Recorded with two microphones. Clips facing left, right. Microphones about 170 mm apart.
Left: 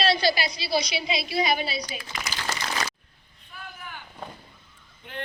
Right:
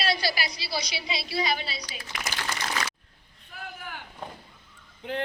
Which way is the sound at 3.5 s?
75° right (ahead or behind).